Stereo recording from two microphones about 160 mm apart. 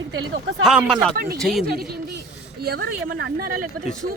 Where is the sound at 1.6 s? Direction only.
70° right (ahead or behind).